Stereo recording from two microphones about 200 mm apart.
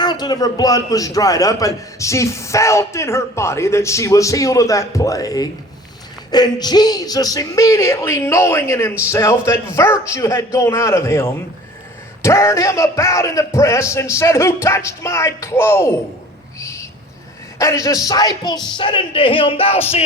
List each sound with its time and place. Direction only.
0.0 s a man's voice: 20° left (ahead or behind)
16.6 s owl: 15° left (ahead or behind)
17.6 s speech: 15° left (ahead or behind)